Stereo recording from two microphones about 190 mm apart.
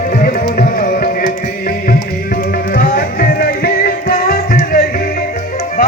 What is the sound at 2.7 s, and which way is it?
Music, 50° left (ahead or behind).